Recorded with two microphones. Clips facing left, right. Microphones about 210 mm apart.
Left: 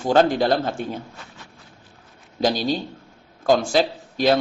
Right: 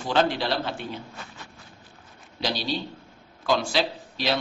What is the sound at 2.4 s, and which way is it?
A man's voice, 45° left (ahead or behind).